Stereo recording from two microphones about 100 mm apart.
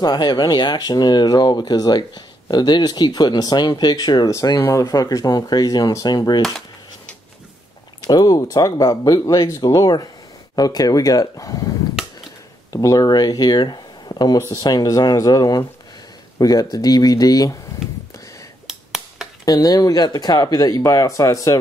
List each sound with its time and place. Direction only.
0.0 s speech: 45° left (ahead or behind)
8.1 s speech: 40° left (ahead or behind)
12.7 s speech: 35° left (ahead or behind)
18.7 s finger snapping: 5° right (ahead or behind)
19.4 s speech: 35° left (ahead or behind)